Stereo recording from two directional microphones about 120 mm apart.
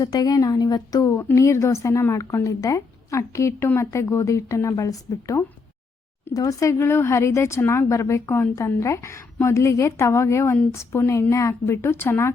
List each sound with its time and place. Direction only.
0.0 s a woman's voice: 30° left (ahead or behind)